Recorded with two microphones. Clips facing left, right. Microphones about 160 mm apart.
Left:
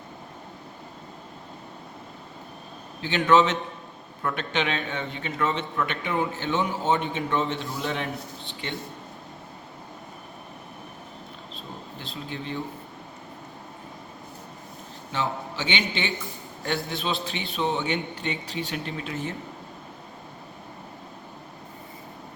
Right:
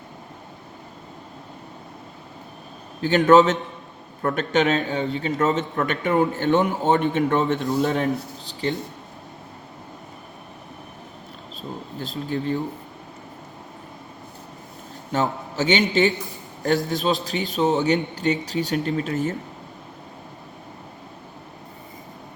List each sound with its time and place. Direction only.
3.0 s a man's voice: 45° right (ahead or behind)
11.9 s a man's voice: 45° right (ahead or behind)
15.1 s a man's voice: 45° right (ahead or behind)